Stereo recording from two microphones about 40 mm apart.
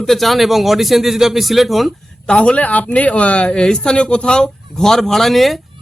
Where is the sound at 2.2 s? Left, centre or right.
Left; by 5.6 s centre.